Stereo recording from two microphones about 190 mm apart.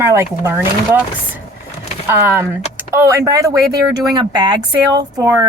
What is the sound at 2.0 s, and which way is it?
A woman's voice, 10° right (ahead or behind).